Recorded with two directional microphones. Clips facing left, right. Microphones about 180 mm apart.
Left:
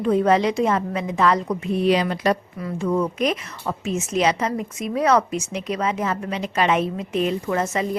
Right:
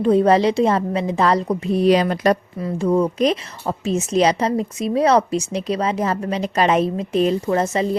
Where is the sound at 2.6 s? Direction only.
30° right (ahead or behind).